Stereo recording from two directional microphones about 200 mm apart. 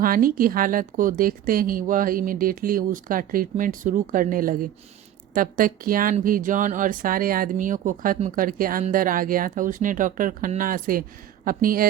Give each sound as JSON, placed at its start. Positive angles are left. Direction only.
{"t": 0.0, "sound": "speech", "side_deg": -45}